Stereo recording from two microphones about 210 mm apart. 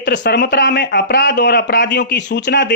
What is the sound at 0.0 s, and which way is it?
Speech, 55° left (ahead or behind).